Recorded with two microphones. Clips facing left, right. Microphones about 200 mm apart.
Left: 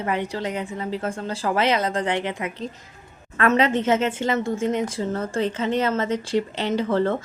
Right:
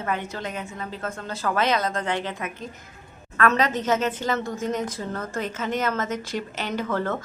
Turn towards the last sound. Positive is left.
turn(degrees=30)  # may be behind; listen again after turning